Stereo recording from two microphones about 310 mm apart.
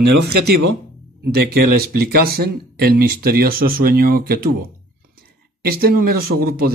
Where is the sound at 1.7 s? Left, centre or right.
Right.